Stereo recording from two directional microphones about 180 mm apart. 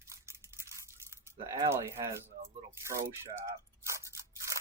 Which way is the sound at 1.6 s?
15° right (ahead or behind).